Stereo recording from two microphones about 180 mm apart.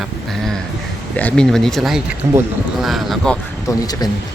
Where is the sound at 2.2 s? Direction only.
20° right (ahead or behind).